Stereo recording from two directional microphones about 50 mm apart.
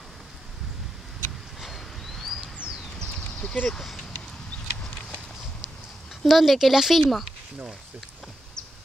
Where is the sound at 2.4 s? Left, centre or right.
Right.